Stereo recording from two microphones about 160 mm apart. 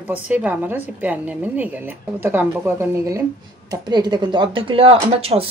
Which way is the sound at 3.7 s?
25° right (ahead or behind).